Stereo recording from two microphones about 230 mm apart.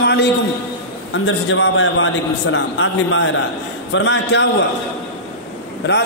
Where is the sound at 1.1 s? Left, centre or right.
Left.